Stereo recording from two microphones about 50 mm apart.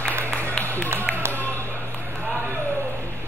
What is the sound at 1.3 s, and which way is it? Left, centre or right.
Basketball bounce, left.